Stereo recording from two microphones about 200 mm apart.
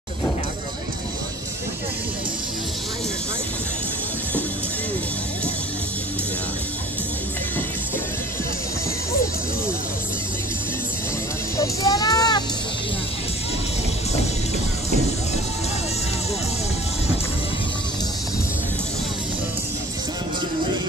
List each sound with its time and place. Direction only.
11.5 s music: 15° left (ahead or behind)